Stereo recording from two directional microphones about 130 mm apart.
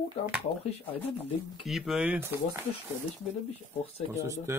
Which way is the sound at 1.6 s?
Centre (ahead or behind).